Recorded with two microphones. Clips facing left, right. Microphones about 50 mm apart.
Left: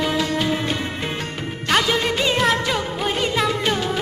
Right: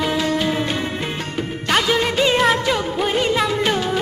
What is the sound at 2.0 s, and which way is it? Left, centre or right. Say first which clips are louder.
Music: right 3 dB; right.